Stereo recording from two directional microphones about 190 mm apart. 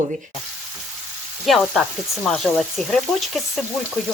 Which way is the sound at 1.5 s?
Centre (ahead or behind).